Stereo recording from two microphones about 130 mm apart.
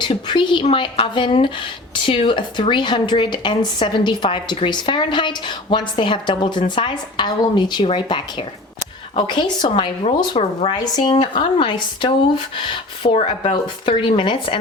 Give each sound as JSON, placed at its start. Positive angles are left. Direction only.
{"t": 0.0, "sound": "speech", "side_deg": 40}
{"t": 10.3, "sound": "a woman's voice", "side_deg": 50}
{"t": 10.8, "sound": "a woman's voice", "side_deg": 35}